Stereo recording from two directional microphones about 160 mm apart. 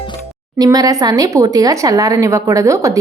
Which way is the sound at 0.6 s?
25° right (ahead or behind).